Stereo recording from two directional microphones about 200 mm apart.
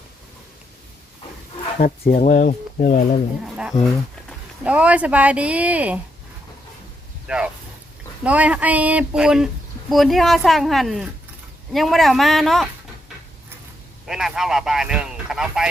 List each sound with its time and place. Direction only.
1.8 s speech: 45° left (ahead or behind)
3.4 s speech: centre (ahead or behind)
7.3 s speech: 5° right (ahead or behind)
14.1 s speech: centre (ahead or behind)